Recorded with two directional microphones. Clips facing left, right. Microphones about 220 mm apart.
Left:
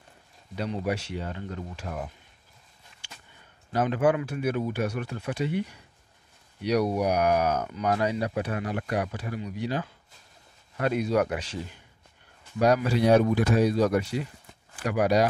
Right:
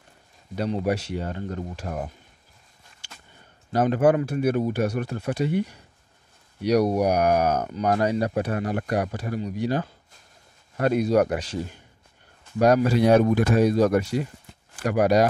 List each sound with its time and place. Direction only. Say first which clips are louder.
0.6 s speech: right 4 dB; 40° right (ahead or behind)
3.0 s a sound: right 1 dB; 40° right (ahead or behind)
3.7 s a man's voice: right 4 dB; 40° right (ahead or behind)